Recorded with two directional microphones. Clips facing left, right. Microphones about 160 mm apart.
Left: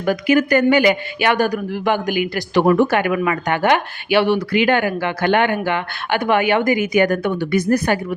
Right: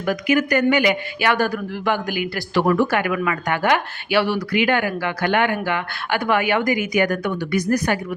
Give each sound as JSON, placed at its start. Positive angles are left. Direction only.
{"t": 0.0, "sound": "speech", "side_deg": 30}
{"t": 1.3, "sound": "speech", "side_deg": 15}